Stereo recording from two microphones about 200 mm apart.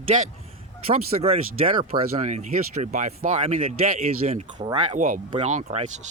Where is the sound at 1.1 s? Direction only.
35° right (ahead or behind).